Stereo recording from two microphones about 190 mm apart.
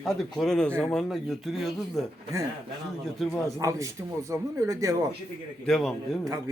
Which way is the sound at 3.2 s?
Centre (ahead or behind).